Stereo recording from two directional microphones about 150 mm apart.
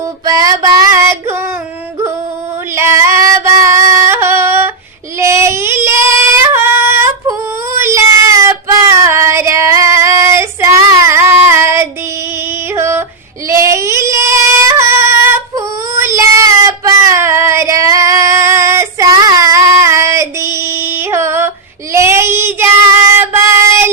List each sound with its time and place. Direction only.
0.3 s female singing: 25° right (ahead or behind)
2.7 s female singing: 20° right (ahead or behind)
12.7 s yodeling: 15° right (ahead or behind)
13.5 s singing: 20° right (ahead or behind)
21.9 s child singing: 20° right (ahead or behind)